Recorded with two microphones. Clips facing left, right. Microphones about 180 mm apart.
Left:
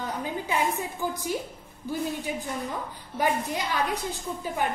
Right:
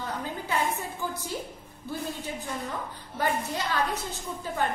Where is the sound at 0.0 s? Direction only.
15° left (ahead or behind).